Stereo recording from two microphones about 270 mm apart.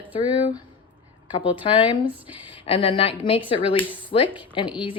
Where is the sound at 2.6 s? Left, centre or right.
Centre.